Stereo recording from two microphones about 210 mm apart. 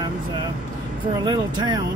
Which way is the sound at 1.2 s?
20° right (ahead or behind).